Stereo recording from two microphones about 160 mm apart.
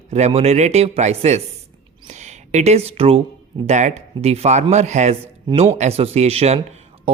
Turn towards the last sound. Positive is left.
turn(degrees=-40)  # may be behind; listen again after turning